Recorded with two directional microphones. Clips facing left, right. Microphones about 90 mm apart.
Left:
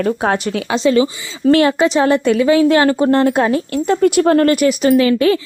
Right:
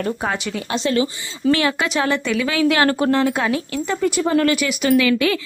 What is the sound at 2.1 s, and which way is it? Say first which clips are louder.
Speech: left 7 dB; 45° left (ahead or behind).